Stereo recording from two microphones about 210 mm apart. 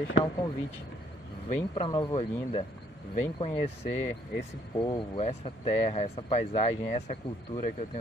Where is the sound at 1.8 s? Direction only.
20° left (ahead or behind).